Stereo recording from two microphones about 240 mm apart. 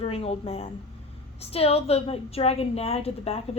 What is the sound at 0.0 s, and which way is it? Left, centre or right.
A woman's voice, left.